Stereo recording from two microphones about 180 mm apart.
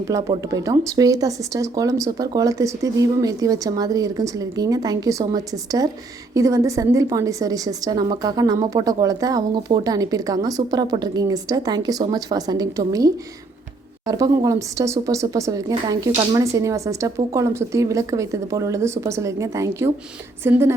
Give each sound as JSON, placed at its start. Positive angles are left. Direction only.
{"t": 0.1, "sound": "a woman's voice", "side_deg": -20}